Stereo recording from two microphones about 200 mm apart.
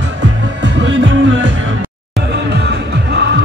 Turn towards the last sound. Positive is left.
turn(degrees=-65)  # may be behind; listen again after turning